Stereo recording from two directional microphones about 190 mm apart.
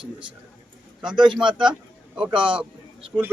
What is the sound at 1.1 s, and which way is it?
Speech, 25° right (ahead or behind).